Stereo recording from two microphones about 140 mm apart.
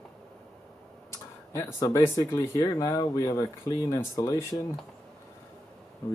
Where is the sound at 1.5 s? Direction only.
20° left (ahead or behind).